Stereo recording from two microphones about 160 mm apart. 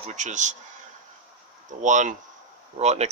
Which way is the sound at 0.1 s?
50° right (ahead or behind).